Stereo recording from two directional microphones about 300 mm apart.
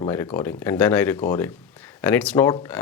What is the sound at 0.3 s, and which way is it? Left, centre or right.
Speech, centre.